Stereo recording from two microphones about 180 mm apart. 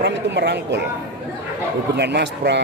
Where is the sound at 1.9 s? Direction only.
70° right (ahead or behind).